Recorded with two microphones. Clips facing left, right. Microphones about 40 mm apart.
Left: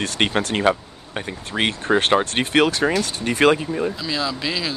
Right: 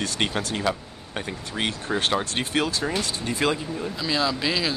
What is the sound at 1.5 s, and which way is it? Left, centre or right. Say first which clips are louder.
Speech: left 7 dB; left.